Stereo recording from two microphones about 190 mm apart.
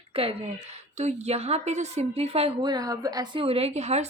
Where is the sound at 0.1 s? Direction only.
30° right (ahead or behind).